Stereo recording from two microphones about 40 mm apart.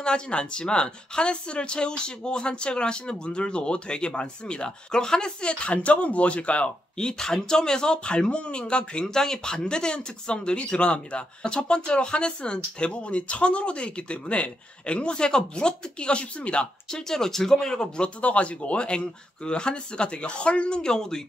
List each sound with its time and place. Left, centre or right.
0.0 s speech: left
7.0 s speech: centre
17.1 s speech: centre